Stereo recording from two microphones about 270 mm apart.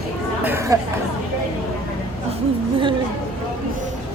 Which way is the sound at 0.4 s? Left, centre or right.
Centre.